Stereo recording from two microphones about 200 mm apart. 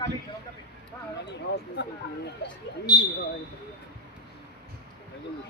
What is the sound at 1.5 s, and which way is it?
Speech, 55° left (ahead or behind).